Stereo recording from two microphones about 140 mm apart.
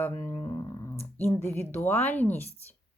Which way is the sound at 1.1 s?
15° left (ahead or behind).